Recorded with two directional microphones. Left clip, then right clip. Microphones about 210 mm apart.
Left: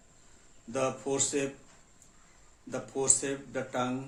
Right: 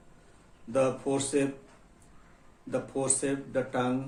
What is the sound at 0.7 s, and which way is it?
Speech, 20° left (ahead or behind).